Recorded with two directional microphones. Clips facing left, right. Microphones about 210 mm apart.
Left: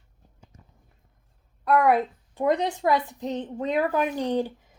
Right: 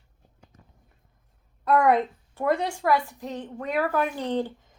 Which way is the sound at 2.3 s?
15° left (ahead or behind).